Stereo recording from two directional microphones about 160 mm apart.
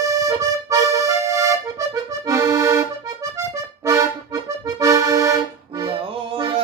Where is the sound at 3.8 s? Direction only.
20° right (ahead or behind).